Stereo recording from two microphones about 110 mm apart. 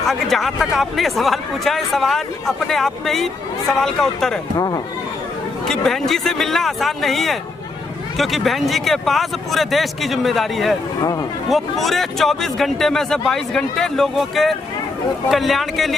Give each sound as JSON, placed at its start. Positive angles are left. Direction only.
{"t": 0.0, "sound": "speech", "side_deg": 0}
{"t": 4.5, "sound": "speech", "side_deg": 35}
{"t": 5.6, "sound": "speech", "side_deg": 5}
{"t": 11.0, "sound": "speech", "side_deg": 35}
{"t": 11.4, "sound": "speech", "side_deg": 0}